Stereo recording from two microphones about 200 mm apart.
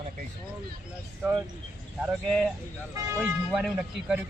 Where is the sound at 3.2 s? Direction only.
5° right (ahead or behind).